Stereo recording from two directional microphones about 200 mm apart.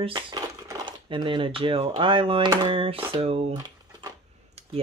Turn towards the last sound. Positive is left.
turn(degrees=-30)  # may be behind; listen again after turning